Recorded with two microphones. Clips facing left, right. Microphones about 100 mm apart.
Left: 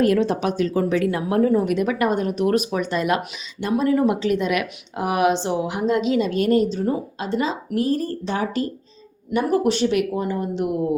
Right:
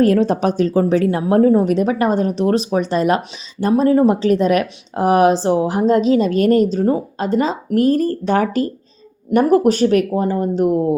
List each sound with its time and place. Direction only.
0.0 s speech: 40° right (ahead or behind)